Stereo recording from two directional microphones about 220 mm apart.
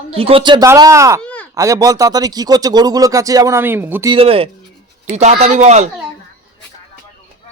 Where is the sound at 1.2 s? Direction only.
5° left (ahead or behind).